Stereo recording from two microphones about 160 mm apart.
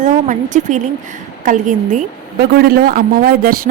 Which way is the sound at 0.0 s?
50° right (ahead or behind).